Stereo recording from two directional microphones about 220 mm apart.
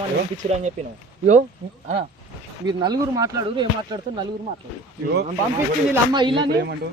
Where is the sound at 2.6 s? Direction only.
20° right (ahead or behind).